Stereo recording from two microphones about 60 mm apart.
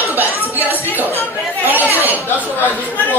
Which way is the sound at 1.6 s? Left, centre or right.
Right.